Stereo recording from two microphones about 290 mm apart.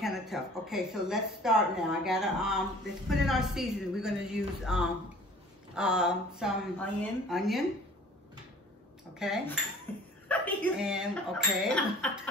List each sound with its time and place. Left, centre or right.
0.0 s a woman's voice: centre
9.2 s a woman's voice: centre